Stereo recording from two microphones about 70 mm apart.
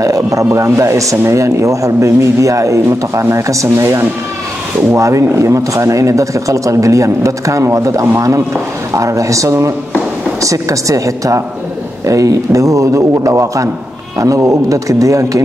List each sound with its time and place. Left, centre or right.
0.0 s speech: right